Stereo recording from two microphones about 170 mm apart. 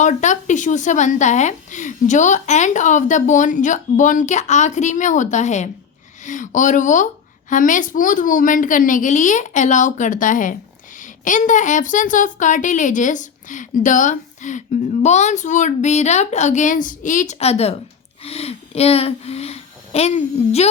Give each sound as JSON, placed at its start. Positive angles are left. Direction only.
{"t": 0.0, "sound": "a woman's voice", "side_deg": 45}